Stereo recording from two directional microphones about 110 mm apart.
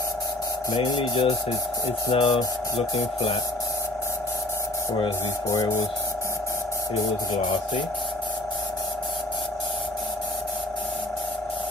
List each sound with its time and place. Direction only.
0.7 s speech: 50° left (ahead or behind)